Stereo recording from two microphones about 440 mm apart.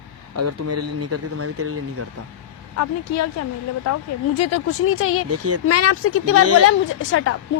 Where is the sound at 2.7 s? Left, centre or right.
Left.